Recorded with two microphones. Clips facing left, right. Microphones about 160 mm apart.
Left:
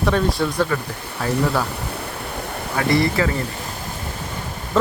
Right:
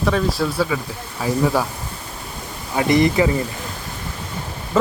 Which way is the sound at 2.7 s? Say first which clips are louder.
Right 3 dB; 20° right (ahead or behind).